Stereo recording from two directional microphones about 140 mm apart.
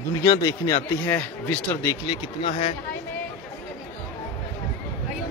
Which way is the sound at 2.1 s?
40° left (ahead or behind).